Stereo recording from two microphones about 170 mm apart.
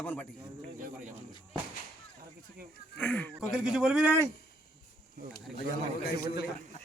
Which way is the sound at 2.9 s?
10° left (ahead or behind).